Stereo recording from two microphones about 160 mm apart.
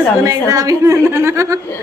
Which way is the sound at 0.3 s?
20° right (ahead or behind).